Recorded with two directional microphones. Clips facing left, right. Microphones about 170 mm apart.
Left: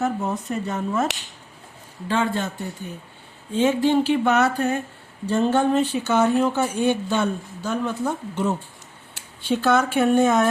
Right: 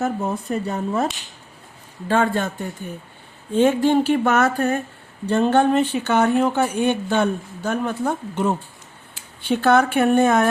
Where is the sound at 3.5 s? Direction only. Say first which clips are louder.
Right 2 dB; 55° right (ahead or behind).